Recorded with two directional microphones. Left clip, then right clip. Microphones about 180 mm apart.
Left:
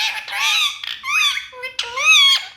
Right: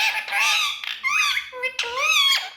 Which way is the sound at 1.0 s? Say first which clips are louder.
Left 3 dB; 20° left (ahead or behind).